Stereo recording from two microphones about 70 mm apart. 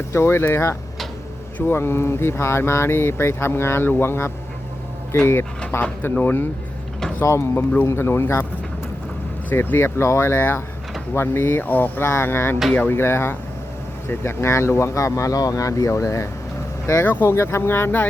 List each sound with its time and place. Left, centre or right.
0.1 s speech: left
7.3 s speech: left
9.5 s speech: left